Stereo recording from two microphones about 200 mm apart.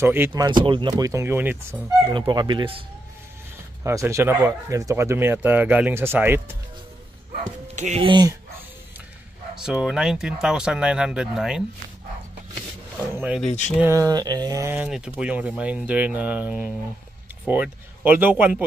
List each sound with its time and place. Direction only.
0.0 s speech: 10° right (ahead or behind)
2.1 s speech: 25° right (ahead or behind)
3.8 s speech: 15° right (ahead or behind)
7.7 s speech: 35° right (ahead or behind)
9.6 s speech: 5° right (ahead or behind)
13.1 s a sound: 10° right (ahead or behind)
13.5 s speech: 35° left (ahead or behind)
13.7 s speech: 15° right (ahead or behind)